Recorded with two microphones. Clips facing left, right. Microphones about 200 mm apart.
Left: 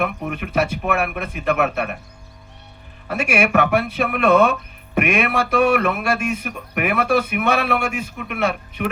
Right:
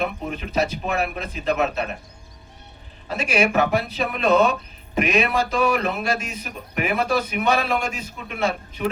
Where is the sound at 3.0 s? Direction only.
60° left (ahead or behind).